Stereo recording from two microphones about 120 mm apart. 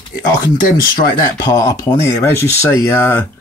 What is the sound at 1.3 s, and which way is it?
Speech, 30° left (ahead or behind).